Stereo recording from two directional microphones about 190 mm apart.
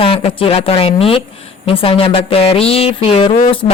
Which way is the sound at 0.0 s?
30° left (ahead or behind).